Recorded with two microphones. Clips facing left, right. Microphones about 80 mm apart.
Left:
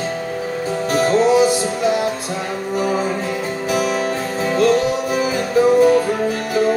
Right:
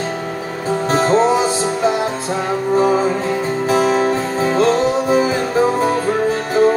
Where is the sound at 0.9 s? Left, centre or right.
Right.